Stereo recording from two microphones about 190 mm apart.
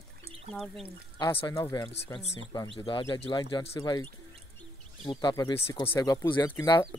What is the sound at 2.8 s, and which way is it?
Speech, 25° left (ahead or behind).